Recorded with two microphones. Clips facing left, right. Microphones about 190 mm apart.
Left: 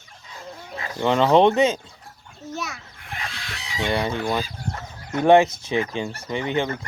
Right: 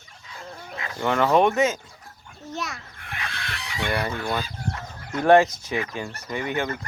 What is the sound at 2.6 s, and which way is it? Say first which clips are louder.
Speech: even; centre (ahead or behind).